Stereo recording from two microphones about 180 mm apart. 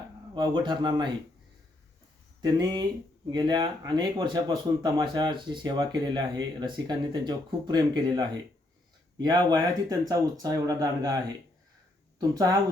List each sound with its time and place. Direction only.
0.3 s speech: 25° right (ahead or behind)
2.4 s speech: 20° right (ahead or behind)
12.3 s speech: 20° right (ahead or behind)